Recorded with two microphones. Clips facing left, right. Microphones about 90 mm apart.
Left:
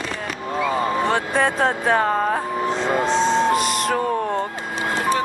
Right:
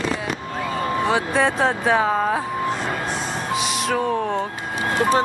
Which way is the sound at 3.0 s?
20° left (ahead or behind).